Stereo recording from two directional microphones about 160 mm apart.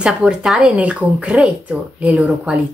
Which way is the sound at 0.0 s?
5° right (ahead or behind).